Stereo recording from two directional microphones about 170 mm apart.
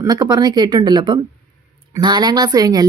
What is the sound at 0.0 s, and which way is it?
Speech, 25° right (ahead or behind).